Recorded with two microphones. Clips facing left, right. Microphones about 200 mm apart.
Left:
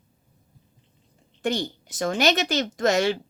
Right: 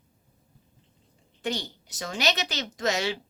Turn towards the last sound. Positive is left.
turn(degrees=50)  # may be behind; listen again after turning